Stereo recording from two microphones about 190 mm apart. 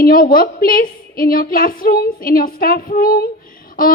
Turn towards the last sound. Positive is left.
turn(degrees=50)  # may be behind; listen again after turning